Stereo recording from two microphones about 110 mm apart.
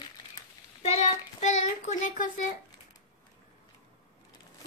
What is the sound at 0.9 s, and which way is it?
Child singing, 90° left.